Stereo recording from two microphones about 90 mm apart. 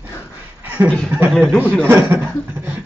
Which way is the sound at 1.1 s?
15° right (ahead or behind).